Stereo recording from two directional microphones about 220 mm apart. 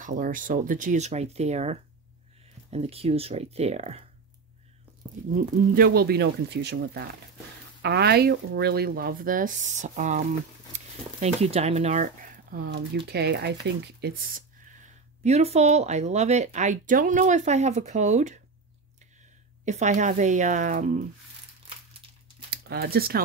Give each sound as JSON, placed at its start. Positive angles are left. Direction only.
{"t": 0.0, "sound": "speech", "side_deg": -35}
{"t": 5.3, "sound": "speech", "side_deg": -40}
{"t": 15.2, "sound": "speech", "side_deg": -30}
{"t": 19.6, "sound": "speech", "side_deg": -35}
{"t": 22.5, "sound": "speech", "side_deg": -45}